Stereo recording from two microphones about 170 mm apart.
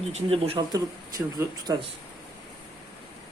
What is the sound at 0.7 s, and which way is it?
Speech, 20° right (ahead or behind).